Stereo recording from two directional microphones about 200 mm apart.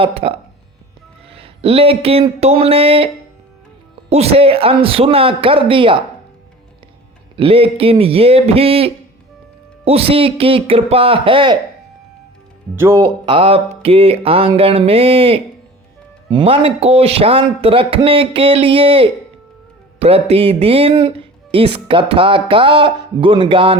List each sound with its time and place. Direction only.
0.0 s speech: 30° right (ahead or behind)
4.1 s speech: 30° right (ahead or behind)
7.3 s speech: 30° right (ahead or behind)
12.7 s speech: 15° right (ahead or behind)
13.0 s speech: 25° right (ahead or behind)